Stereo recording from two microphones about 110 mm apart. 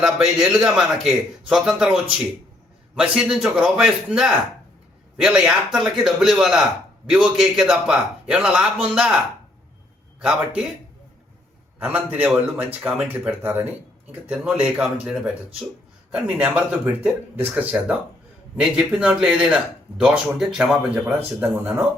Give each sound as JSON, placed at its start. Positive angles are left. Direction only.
{"t": 0.0, "sound": "a man's voice", "side_deg": -5}
{"t": 11.8, "sound": "a man's voice", "side_deg": -15}